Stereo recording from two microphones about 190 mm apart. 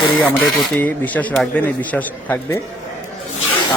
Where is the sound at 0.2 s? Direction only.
10° left (ahead or behind).